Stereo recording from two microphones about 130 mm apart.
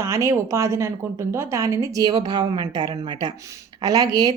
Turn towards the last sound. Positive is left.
turn(degrees=-30)  # may be behind; listen again after turning